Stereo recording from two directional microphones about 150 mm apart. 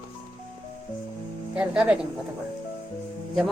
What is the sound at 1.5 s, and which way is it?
Music, 10° right (ahead or behind).